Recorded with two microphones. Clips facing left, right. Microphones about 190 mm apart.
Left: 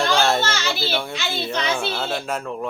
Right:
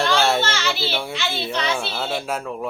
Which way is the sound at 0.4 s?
40° left (ahead or behind).